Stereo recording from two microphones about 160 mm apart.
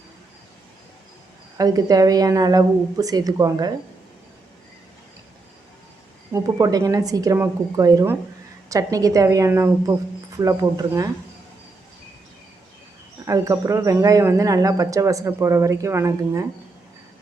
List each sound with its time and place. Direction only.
1.5 s speech: 25° right (ahead or behind)
6.3 s speech: 20° right (ahead or behind)
13.2 s speech: 20° right (ahead or behind)